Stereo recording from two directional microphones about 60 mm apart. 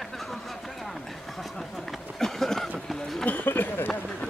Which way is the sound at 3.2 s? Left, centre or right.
Left.